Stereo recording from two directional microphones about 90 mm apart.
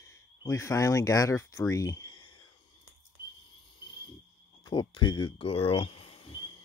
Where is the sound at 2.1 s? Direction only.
60° left (ahead or behind).